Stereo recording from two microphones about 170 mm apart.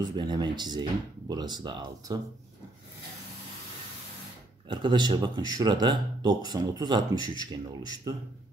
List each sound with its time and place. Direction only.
0.1 s speech: 25° right (ahead or behind)
4.6 s speech: 25° right (ahead or behind)